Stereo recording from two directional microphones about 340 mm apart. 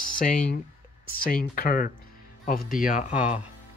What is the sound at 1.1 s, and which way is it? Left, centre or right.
Speech, left.